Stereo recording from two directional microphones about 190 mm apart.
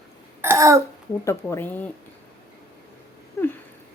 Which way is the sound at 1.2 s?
15° left (ahead or behind).